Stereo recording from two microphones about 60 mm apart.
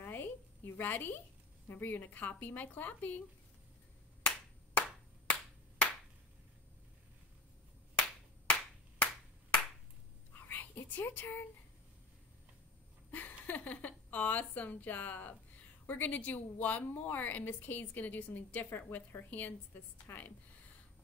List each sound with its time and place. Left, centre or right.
0.0 s a sound: left
1.7 s a woman's voice: left
4.7 s clapping: left
10.4 s whispering: left
13.1 s a woman's voice: left
20.1 s speech: left